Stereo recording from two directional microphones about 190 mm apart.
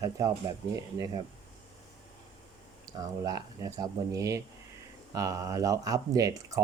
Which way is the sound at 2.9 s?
20° right (ahead or behind).